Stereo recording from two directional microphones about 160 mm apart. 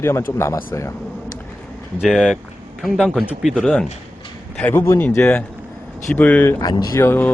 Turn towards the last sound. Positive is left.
turn(degrees=15)  # may be behind; listen again after turning